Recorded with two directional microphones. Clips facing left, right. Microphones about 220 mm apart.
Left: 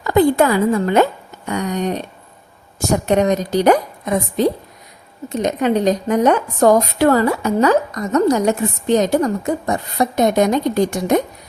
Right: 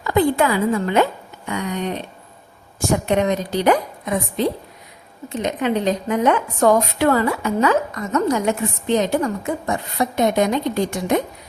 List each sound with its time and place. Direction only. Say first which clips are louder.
0.0 s a woman's voice: left 4 dB; 40° left (ahead or behind)
3.1 s a woman's voice: left 6 dB; 40° left (ahead or behind)